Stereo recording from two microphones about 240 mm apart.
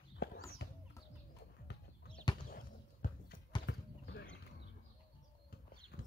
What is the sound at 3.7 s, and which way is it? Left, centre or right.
Clip-clop, left.